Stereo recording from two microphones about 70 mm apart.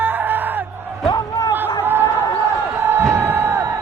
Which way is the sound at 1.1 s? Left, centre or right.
Left.